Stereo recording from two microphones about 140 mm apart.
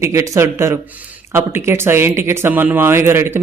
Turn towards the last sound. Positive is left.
turn(degrees=-15)  # may be behind; listen again after turning